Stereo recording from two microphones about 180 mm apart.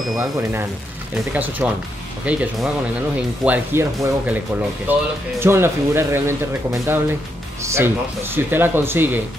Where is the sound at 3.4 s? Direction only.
10° right (ahead or behind).